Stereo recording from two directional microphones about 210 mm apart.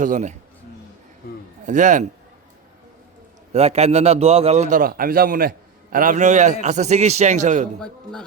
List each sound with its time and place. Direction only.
0.0 s a man's voice: 35° right (ahead or behind)
1.6 s a man's voice: 35° right (ahead or behind)
3.5 s a man's voice: 30° right (ahead or behind)